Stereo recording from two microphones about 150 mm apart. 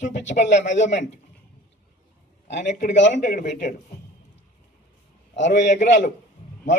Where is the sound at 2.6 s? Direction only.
50° left (ahead or behind).